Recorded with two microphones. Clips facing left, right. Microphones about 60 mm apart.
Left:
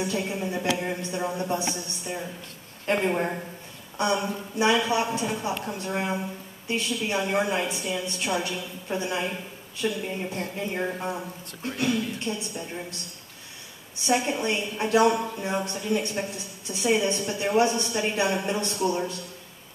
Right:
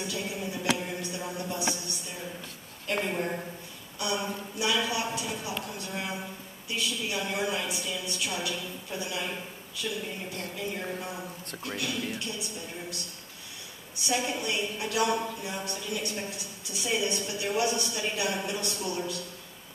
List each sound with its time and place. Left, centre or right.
0.0 s music: left
3.0 s a woman's voice: left
14.0 s a woman's voice: left